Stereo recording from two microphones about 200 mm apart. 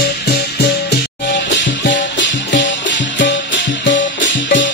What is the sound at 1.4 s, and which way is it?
Music, 65° left (ahead or behind).